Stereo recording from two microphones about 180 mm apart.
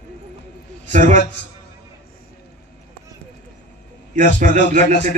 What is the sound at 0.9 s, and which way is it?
Speech, 45° right (ahead or behind).